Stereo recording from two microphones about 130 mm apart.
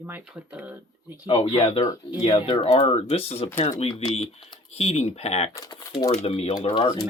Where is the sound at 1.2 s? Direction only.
45° left (ahead or behind).